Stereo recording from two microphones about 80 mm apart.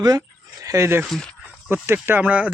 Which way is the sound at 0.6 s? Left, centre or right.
Right.